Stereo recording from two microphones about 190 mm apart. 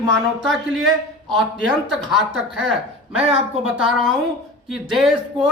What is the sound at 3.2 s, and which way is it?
Speech, 30° right (ahead or behind).